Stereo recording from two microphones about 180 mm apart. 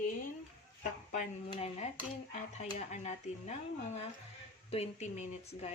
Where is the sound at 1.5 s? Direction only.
35° left (ahead or behind).